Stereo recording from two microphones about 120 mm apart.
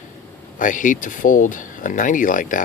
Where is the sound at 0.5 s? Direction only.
90° left.